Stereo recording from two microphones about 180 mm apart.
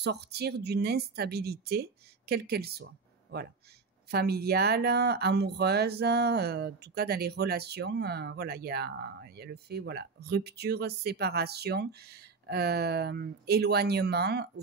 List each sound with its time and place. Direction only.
0.0 s speech: 65° right (ahead or behind)